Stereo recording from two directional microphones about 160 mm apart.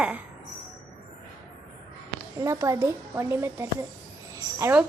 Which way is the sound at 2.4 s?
20° right (ahead or behind).